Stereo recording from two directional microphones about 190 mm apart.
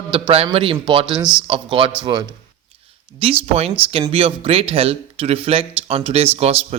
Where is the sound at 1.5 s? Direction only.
30° right (ahead or behind).